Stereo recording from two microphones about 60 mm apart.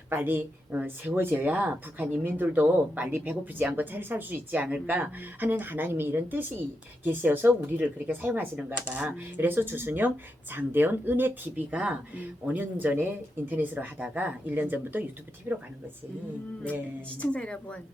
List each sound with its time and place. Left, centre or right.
0.1 s speech: right
3.2 s speech: right
17.2 s a woman's voice: centre